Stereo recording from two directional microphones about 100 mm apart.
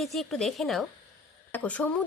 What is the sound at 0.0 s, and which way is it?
Speech, centre (ahead or behind).